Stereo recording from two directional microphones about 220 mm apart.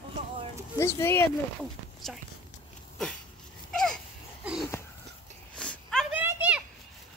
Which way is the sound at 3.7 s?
5° left (ahead or behind).